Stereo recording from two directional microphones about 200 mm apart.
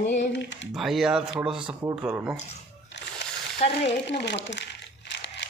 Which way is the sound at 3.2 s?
60° left (ahead or behind).